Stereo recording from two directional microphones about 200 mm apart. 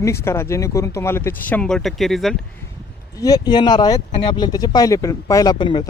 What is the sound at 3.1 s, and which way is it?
Speech, 20° left (ahead or behind).